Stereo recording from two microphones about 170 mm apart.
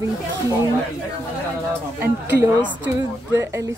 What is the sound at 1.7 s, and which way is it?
Speech, 10° right (ahead or behind).